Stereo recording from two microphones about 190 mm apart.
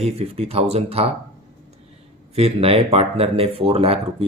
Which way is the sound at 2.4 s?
30° right (ahead or behind).